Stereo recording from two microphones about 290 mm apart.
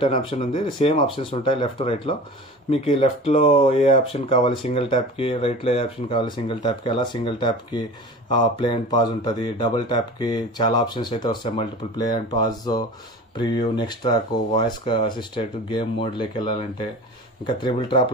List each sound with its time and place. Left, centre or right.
0.0 s speech: centre